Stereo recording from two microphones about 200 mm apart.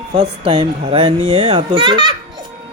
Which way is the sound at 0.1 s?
30° right (ahead or behind).